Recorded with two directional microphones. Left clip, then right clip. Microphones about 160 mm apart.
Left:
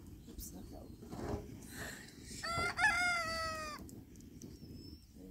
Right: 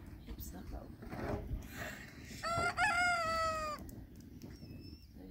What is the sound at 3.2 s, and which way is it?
Cat, 70° right (ahead or behind).